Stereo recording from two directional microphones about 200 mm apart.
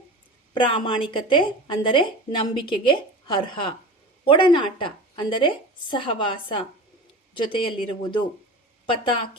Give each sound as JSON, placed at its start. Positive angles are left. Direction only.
{"t": 0.5, "sound": "a woman's voice", "side_deg": 25}